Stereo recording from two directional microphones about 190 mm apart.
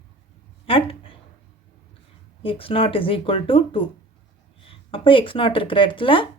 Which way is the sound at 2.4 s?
30° left (ahead or behind).